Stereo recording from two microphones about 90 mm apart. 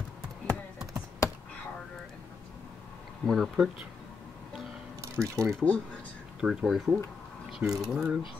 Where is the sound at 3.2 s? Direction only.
Centre (ahead or behind).